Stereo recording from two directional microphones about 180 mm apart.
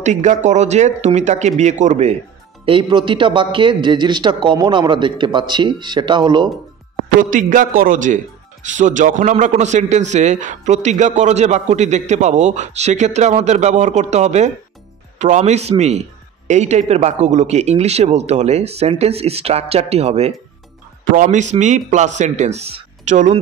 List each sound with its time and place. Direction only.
0.0 s a man's voice: 40° right (ahead or behind)
2.6 s speech: 30° right (ahead or behind)
7.2 s a man's voice: 45° right (ahead or behind)